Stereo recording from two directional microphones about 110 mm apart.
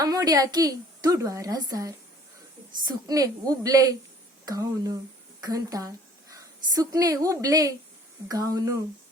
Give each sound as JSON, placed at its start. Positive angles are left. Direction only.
{"t": 0.0, "sound": "a woman's voice", "side_deg": -35}